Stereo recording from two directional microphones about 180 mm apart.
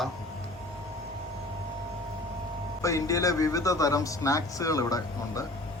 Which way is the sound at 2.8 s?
20° left (ahead or behind).